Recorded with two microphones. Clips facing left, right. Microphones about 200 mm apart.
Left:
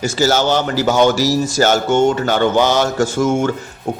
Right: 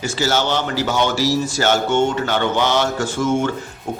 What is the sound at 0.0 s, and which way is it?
A man's voice, 40° left (ahead or behind).